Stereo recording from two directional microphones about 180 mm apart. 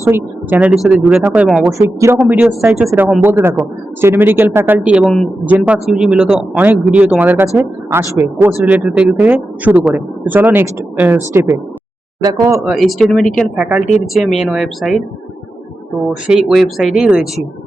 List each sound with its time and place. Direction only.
0.0 s speech: 10° right (ahead or behind)
5.5 s speech: 10° right (ahead or behind)
12.6 s speech: centre (ahead or behind)
16.2 s speech: 5° right (ahead or behind)